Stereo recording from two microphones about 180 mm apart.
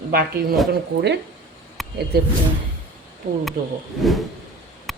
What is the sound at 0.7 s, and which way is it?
Speech, 70° right (ahead or behind).